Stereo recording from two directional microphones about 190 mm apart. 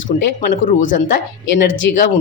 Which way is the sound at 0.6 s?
40° left (ahead or behind).